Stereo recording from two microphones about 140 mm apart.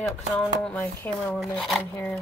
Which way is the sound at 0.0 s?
5° left (ahead or behind).